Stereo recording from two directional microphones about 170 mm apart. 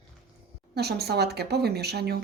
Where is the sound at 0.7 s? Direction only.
70° right (ahead or behind).